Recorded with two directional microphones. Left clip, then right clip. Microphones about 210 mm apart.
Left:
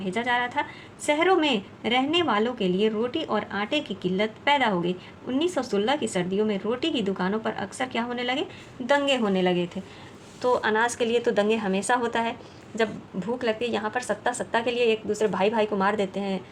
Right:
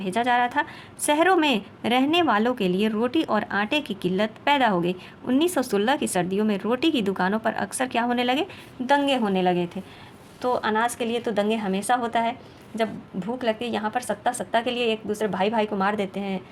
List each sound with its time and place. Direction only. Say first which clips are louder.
0.0 s a woman's voice: right 4 dB; 30° right (ahead or behind)
8.9 s a woman's voice: right 1 dB; 15° right (ahead or behind)
10.4 s a woman's voice: even; 5° right (ahead or behind)